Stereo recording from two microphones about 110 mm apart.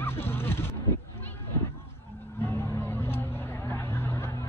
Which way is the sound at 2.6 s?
20° left (ahead or behind).